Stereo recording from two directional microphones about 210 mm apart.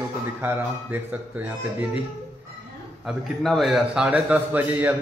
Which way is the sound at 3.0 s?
Centre (ahead or behind).